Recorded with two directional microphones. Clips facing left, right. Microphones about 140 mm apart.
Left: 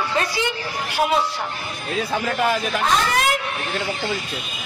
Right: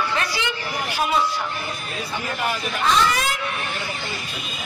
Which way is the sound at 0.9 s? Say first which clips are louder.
Left 2 dB; 70° left (ahead or behind).